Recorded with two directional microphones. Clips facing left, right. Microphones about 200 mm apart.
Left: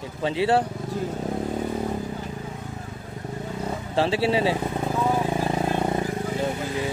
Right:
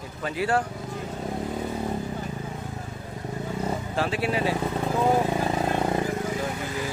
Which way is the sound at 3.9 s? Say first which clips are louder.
Left 6 dB; 30° left (ahead or behind).